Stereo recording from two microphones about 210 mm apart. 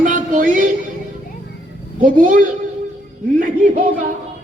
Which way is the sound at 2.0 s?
40° right (ahead or behind).